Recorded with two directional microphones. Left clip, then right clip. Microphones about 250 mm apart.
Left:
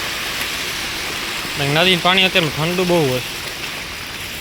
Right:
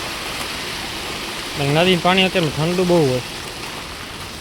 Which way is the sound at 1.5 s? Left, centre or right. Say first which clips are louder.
Left 1 dB; centre.